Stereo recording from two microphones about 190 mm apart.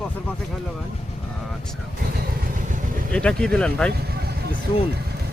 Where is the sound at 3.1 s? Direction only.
5° left (ahead or behind).